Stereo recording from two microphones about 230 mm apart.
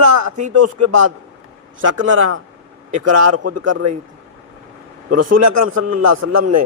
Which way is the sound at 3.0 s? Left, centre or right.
Right.